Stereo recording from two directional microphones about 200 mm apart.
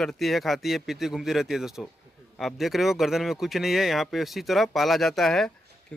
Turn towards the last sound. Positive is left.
turn(degrees=5)  # may be behind; listen again after turning